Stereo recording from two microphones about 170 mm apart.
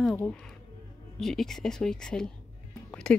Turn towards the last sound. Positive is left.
turn(degrees=5)  # may be behind; listen again after turning